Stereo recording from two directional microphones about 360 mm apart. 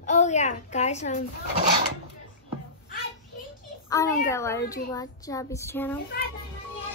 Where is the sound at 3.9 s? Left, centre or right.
Centre.